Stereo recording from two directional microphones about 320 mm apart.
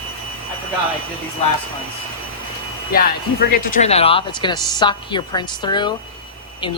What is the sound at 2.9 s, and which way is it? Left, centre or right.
Speech, left.